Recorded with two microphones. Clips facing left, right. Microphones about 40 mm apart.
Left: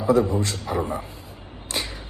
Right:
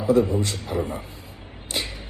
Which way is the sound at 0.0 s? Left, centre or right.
Left.